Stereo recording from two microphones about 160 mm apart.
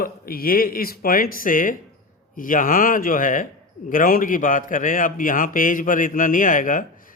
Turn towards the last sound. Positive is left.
turn(degrees=55)  # may be behind; listen again after turning